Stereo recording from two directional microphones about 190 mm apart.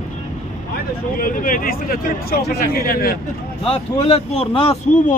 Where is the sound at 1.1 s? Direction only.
45° left (ahead or behind).